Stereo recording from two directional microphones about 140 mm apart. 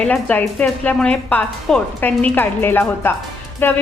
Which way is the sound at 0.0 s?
10° left (ahead or behind).